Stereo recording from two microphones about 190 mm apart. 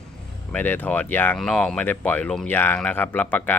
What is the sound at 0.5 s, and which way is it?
Speech, 10° left (ahead or behind).